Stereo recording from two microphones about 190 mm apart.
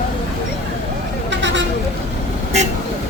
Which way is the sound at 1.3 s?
70° right (ahead or behind).